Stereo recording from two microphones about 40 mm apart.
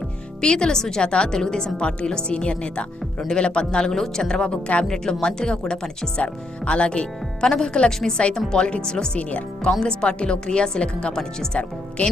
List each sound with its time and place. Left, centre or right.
0.4 s a woman's voice: left
3.2 s a woman's voice: centre
6.1 s a woman's voice: left
7.4 s speech: centre
8.5 s a woman's voice: left
12.0 s speech: left